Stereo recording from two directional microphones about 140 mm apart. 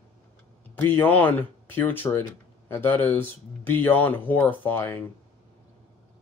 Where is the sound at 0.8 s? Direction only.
15° left (ahead or behind).